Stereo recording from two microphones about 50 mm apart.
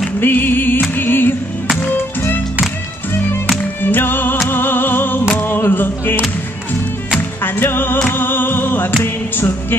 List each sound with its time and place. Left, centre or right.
0.2 s music: left
3.1 s music: left
7.2 s music: left
8.1 s a sound: left
9.0 s music: left